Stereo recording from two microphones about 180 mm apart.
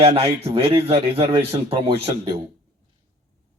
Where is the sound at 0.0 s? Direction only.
35° right (ahead or behind).